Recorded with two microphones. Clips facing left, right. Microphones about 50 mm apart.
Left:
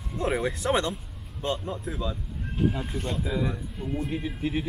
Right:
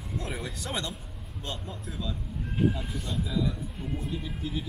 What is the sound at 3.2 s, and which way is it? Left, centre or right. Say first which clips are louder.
Speech: right 2 dB; left.